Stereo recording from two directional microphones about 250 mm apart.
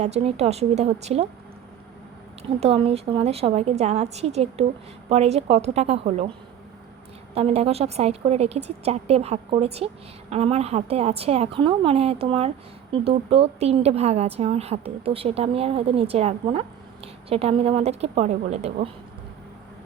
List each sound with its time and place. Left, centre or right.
0.0 s a woman's voice: right
2.4 s a woman's voice: right
7.3 s a woman's voice: right